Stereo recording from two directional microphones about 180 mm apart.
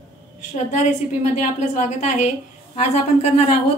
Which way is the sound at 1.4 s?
45° left (ahead or behind).